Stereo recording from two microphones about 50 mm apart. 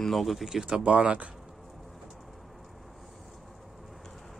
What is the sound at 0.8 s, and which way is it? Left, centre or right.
Speech, right.